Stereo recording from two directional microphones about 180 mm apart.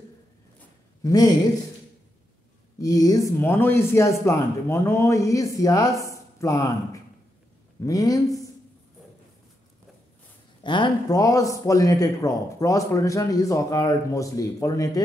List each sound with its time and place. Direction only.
1.0 s a man's voice: 20° left (ahead or behind)
2.8 s a man's voice: 20° left (ahead or behind)
10.6 s speech: 25° left (ahead or behind)